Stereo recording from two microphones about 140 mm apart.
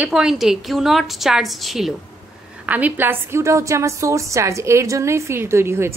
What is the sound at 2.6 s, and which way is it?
A woman's voice, 10° right (ahead or behind).